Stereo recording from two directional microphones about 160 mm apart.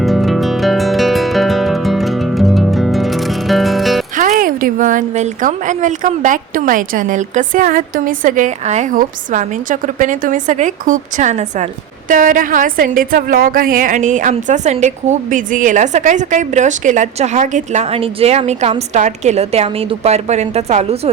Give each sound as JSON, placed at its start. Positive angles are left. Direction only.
{"t": 0.0, "sound": "music", "side_deg": 0}
{"t": 4.2, "sound": "speech", "side_deg": -55}